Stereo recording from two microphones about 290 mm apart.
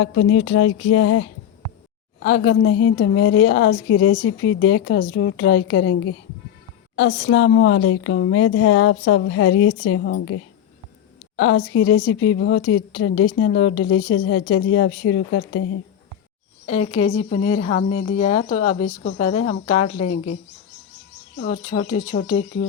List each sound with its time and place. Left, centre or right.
0.0 s speech: left
16.6 s speech: left
21.3 s speech: left